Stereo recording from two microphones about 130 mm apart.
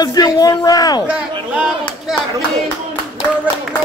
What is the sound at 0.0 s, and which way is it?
A man's voice, 30° left (ahead or behind).